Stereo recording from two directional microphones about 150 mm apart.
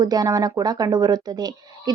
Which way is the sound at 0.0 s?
25° right (ahead or behind).